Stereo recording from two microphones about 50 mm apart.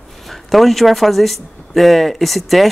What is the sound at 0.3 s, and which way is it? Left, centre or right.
Speech, centre.